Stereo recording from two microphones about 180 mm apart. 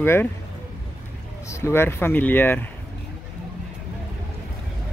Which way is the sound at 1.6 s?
15° left (ahead or behind).